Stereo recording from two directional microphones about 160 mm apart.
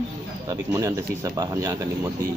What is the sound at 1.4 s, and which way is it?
Speech, 20° right (ahead or behind).